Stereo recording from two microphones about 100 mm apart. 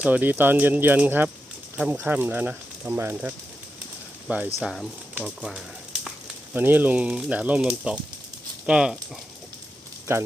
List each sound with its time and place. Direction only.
0.0 s speech: 15° right (ahead or behind)
4.6 s speech: 5° left (ahead or behind)
6.5 s speech: 20° right (ahead or behind)